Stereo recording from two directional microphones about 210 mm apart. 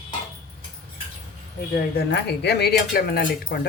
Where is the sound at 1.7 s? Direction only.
45° left (ahead or behind).